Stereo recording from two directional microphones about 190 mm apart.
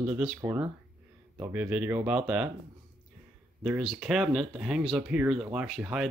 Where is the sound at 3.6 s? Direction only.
Centre (ahead or behind).